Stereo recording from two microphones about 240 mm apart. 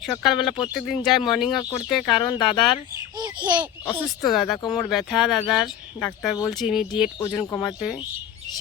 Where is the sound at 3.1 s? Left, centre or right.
Centre.